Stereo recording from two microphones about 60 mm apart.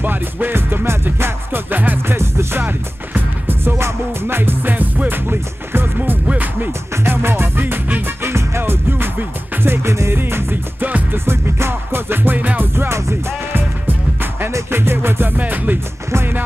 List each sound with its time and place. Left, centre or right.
0.0 s music: right
2.1 s music: right
12.7 s music: right
14.7 s music: right